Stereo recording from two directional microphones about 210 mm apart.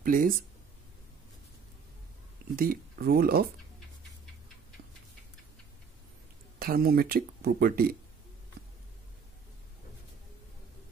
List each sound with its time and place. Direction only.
0.0 s speech: 40° right (ahead or behind)
2.5 s speech: 45° right (ahead or behind)
6.6 s speech: 45° right (ahead or behind)